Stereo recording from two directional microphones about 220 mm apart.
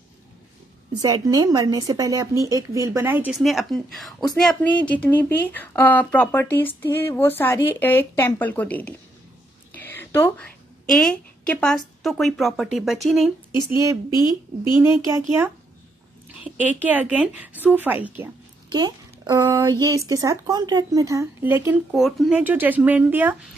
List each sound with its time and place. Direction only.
0.9 s a woman's voice: 15° right (ahead or behind); by 13.3 s centre (ahead or behind)
13.7 s speech: 15° right (ahead or behind)
14.1 s speech: 20° left (ahead or behind)
15.0 s speech: 10° right (ahead or behind)
18.7 s speech: 20° right (ahead or behind)